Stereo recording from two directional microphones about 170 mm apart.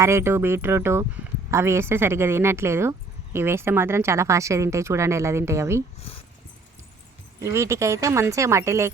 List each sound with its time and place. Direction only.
0.0 s speech: 15° right (ahead or behind)
7.4 s speech: 15° right (ahead or behind)